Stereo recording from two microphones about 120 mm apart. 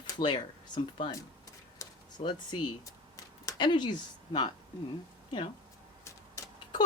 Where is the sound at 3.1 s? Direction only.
35° left (ahead or behind).